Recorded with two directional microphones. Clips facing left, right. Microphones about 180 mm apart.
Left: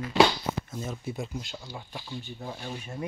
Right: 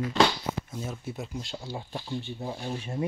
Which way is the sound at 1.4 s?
30° right (ahead or behind).